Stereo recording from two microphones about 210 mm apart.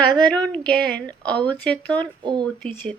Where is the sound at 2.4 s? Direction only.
5° left (ahead or behind).